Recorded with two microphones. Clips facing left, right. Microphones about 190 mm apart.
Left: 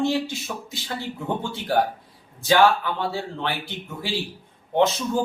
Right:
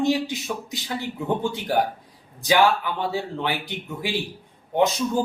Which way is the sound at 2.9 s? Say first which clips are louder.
Right 1 dB; 15° right (ahead or behind).